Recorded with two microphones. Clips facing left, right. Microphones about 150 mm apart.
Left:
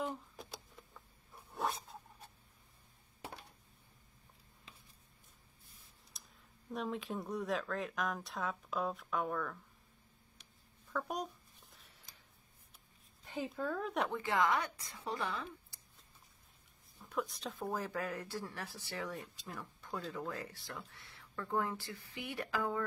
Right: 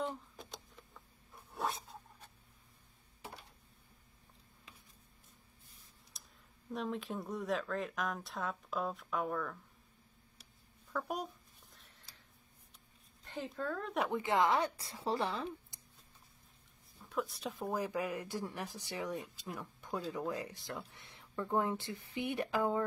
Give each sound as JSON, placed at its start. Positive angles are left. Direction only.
{"t": 0.0, "sound": "a sound", "side_deg": 5}
{"t": 6.1, "sound": "a sound", "side_deg": 0}
{"t": 6.7, "sound": "speech", "side_deg": 0}
{"t": 10.9, "sound": "speech", "side_deg": -5}
{"t": 13.2, "sound": "speech", "side_deg": 10}
{"t": 14.1, "sound": "speech", "side_deg": -20}
{"t": 17.0, "sound": "speech", "side_deg": 0}